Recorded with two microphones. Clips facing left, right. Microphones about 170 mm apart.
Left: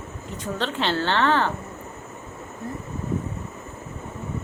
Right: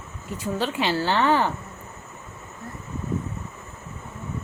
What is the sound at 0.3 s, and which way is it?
A woman's voice, 10° right (ahead or behind).